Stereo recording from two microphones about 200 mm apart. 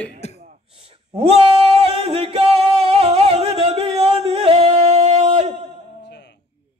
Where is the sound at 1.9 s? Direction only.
30° right (ahead or behind).